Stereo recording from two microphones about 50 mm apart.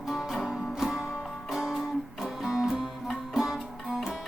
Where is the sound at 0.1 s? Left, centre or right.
Centre.